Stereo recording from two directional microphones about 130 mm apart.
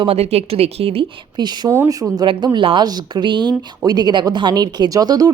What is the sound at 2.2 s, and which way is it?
A woman's voice, 40° right (ahead or behind).